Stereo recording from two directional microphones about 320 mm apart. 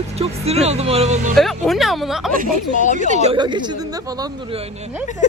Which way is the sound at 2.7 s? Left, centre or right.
Left.